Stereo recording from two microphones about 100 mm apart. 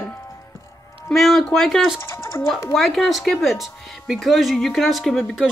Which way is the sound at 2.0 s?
25° left (ahead or behind).